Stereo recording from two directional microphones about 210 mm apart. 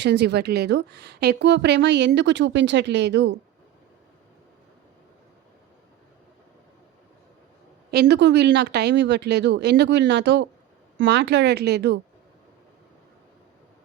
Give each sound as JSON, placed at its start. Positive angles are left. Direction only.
{"t": 0.0, "sound": "a woman's voice", "side_deg": -55}
{"t": 7.9, "sound": "a woman's voice", "side_deg": -50}